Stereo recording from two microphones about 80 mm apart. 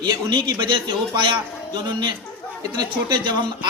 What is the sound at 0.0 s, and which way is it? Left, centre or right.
A man's voice, right.